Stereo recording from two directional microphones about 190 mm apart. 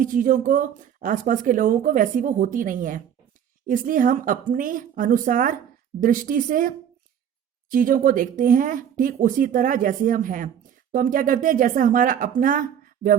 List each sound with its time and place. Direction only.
0.0 s speech: 45° right (ahead or behind)